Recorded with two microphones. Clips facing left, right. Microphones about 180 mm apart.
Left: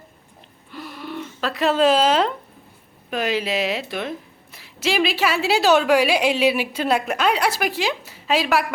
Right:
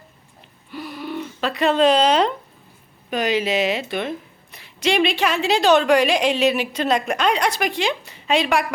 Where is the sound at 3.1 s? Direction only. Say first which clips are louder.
Right 2 dB; centre (ahead or behind).